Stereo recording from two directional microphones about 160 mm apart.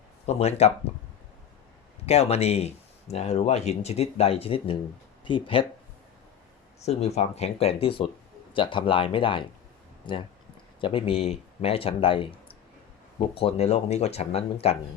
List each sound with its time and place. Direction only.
0.3 s speech: 40° left (ahead or behind)
2.0 s speech: 40° left (ahead or behind)
6.8 s speech: 45° left (ahead or behind)